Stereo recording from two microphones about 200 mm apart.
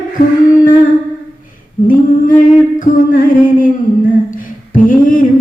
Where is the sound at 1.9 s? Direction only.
40° left (ahead or behind).